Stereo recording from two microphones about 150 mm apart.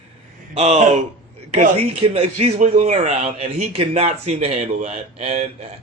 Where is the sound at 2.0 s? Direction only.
40° right (ahead or behind).